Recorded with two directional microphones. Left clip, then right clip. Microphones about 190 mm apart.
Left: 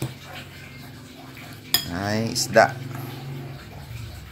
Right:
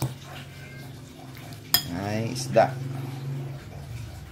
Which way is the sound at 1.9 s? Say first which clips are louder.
Left 5 dB; 5° left (ahead or behind).